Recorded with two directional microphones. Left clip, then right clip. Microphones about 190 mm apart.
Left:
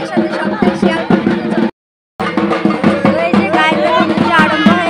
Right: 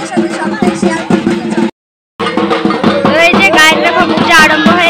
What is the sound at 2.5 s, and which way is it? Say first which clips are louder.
Music: right 3 dB; 55° right (ahead or behind).